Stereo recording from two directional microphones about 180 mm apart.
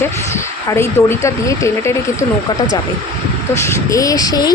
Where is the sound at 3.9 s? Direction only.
20° left (ahead or behind).